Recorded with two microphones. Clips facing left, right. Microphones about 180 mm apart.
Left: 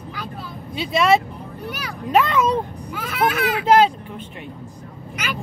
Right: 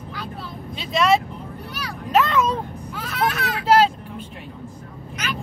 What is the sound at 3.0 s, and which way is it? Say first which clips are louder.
Speech: left 3 dB; 10° left (ahead or behind).